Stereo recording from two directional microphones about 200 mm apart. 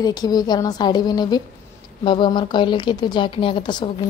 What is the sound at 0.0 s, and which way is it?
Speech, 20° left (ahead or behind).